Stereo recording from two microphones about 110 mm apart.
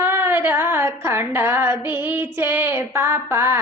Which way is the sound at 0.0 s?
20° right (ahead or behind).